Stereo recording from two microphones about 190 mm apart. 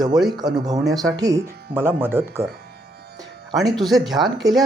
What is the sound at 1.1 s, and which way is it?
Speech, 15° right (ahead or behind).